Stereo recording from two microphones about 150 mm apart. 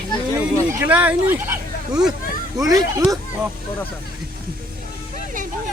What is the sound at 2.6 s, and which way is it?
Speech, 25° right (ahead or behind).